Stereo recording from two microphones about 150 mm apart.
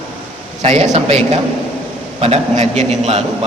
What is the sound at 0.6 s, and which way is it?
A man's voice, 50° right (ahead or behind).